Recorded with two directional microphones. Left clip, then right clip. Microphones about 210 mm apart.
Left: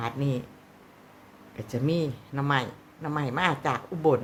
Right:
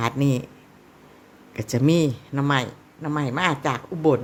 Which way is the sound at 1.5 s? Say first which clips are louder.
Right 8 dB; 35° right (ahead or behind).